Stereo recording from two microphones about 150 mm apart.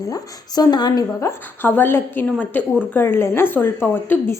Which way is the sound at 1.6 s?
15° left (ahead or behind).